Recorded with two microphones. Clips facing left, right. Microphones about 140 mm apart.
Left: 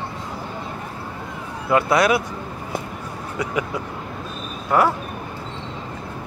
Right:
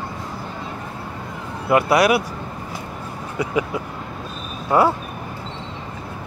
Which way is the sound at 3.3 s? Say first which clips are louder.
Right 3 dB; 25° right (ahead or behind).